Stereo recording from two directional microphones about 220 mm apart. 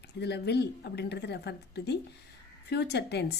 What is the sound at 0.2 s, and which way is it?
Speech, 50° left (ahead or behind).